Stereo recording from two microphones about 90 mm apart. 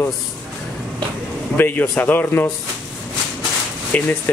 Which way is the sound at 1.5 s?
20° left (ahead or behind).